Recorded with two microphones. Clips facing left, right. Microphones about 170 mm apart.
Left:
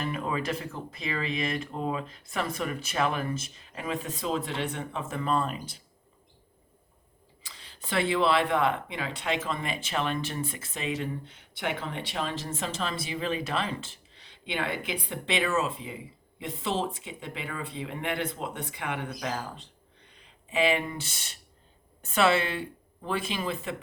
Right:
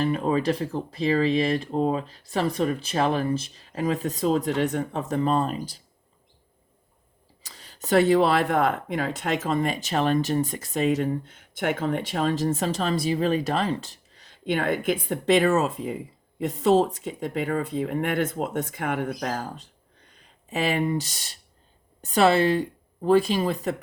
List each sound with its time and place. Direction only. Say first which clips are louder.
0.0 s speech: right 8 dB; 35° right (ahead or behind)
7.4 s speech: right 9 dB; 45° right (ahead or behind)